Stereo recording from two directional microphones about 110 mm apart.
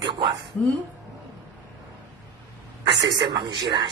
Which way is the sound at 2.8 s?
40° right (ahead or behind).